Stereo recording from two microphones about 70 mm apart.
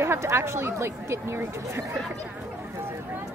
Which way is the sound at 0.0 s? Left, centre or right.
Right.